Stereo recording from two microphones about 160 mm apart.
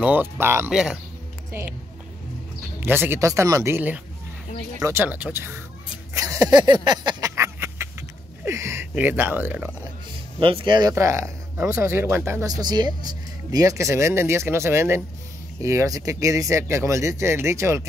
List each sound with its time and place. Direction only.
0.0 s speech: 10° right (ahead or behind)
0.7 s speech: 5° right (ahead or behind)
2.8 s speech: 15° right (ahead or behind)
6.1 s a sound: 20° right (ahead or behind)
8.5 s speech: 15° right (ahead or behind)
10.4 s speech: 30° right (ahead or behind); by 17.8 s 15° right (ahead or behind)